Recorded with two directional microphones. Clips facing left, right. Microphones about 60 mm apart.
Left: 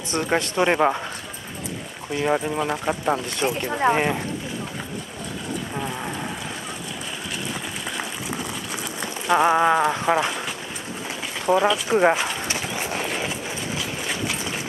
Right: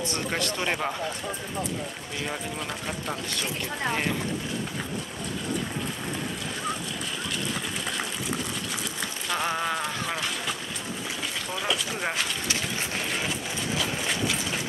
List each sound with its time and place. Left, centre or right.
0.1 s speech: left
2.2 s speech: left
9.0 s speech: left
11.4 s a sound: left